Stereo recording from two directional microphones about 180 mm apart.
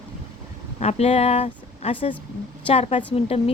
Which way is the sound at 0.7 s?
35° left (ahead or behind).